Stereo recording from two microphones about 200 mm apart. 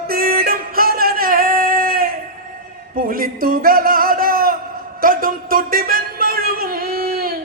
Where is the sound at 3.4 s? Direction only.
45° right (ahead or behind).